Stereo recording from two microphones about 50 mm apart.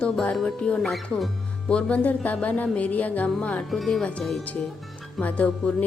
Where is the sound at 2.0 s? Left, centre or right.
Left.